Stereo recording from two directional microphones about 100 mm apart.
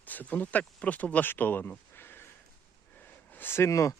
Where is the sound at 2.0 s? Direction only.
20° left (ahead or behind).